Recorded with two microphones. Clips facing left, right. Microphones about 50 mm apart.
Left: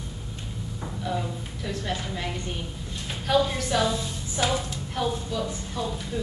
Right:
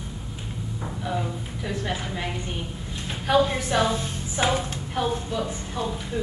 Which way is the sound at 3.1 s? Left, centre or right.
Centre.